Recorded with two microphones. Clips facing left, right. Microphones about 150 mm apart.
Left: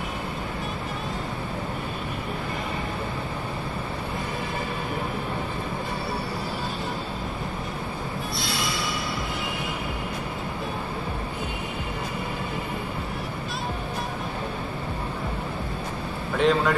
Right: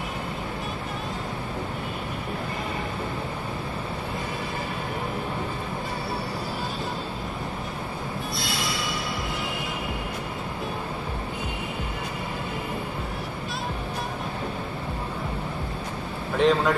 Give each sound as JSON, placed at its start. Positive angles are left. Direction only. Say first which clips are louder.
{"t": 16.3, "sound": "speech", "louder": "right 1 dB", "side_deg": 0}